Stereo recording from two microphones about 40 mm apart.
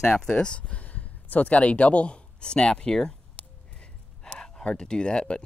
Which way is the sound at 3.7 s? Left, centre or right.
Left.